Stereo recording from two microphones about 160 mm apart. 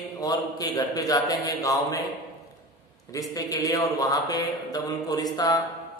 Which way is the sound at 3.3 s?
25° left (ahead or behind).